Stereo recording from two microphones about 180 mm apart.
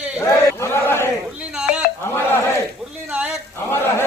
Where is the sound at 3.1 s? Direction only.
5° right (ahead or behind).